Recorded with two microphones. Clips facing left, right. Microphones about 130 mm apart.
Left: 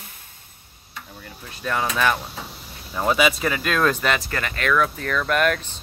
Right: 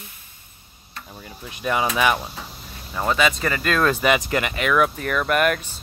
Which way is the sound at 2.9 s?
5° left (ahead or behind).